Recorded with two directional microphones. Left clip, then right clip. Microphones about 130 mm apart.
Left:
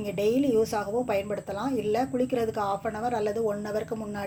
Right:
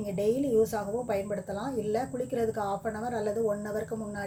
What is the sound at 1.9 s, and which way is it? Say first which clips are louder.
Speech: left 5 dB; 5° left (ahead or behind).